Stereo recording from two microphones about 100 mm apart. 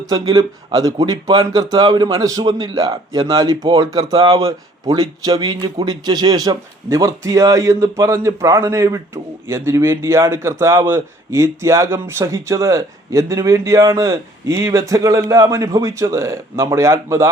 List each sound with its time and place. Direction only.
0.0 s a man's voice: 40° right (ahead or behind)